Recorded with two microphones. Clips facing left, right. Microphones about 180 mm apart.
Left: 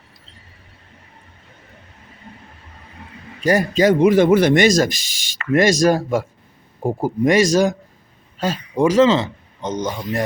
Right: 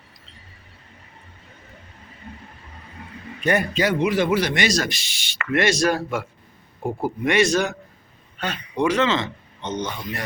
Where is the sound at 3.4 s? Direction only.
35° left (ahead or behind).